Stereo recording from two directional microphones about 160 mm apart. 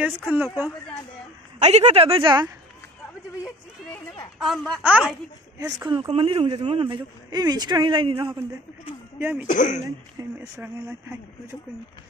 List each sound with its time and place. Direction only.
1.6 s a man's voice: 40° right (ahead or behind)
4.4 s speech: centre (ahead or behind)
5.6 s a man's voice: 20° right (ahead or behind)
9.2 s speech: 10° right (ahead or behind)
9.5 s speech: 50° left (ahead or behind)
10.1 s speech: 20° right (ahead or behind)